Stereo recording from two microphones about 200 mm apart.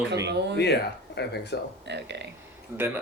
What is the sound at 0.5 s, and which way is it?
Speech, 55° left (ahead or behind).